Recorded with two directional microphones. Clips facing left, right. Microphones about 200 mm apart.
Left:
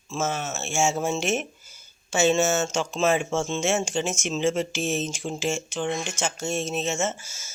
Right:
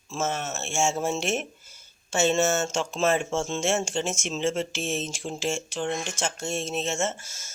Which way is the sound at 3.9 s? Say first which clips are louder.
Left 2 dB; 30° right (ahead or behind).